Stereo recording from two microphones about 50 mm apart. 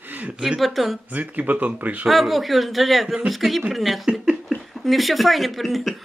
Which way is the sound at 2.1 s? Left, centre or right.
Centre.